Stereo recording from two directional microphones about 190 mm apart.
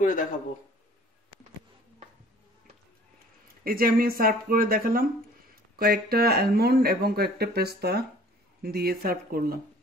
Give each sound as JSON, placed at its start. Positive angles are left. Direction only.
{"t": 0.0, "sound": "a man's voice", "side_deg": 45}
{"t": 3.6, "sound": "speech", "side_deg": -50}